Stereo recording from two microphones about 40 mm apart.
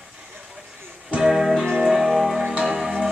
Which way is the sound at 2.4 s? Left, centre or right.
Right.